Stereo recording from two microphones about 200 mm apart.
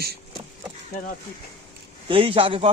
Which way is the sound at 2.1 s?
25° right (ahead or behind).